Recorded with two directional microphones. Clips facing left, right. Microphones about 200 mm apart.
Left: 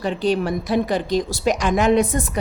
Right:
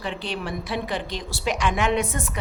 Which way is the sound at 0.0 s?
40° left (ahead or behind).